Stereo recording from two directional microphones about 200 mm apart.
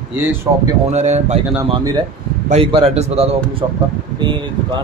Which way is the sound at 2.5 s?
30° right (ahead or behind).